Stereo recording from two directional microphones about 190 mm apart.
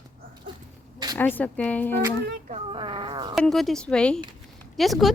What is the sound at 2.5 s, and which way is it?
Speech, 25° right (ahead or behind).